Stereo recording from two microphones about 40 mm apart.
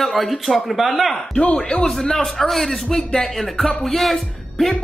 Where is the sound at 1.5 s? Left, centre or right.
Centre.